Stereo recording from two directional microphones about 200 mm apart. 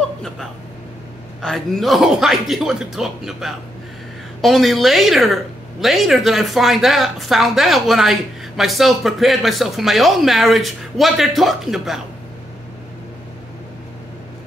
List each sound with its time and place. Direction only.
1.4 s a woman's voice: centre (ahead or behind)